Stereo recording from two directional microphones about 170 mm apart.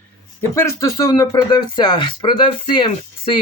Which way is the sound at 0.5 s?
15° left (ahead or behind).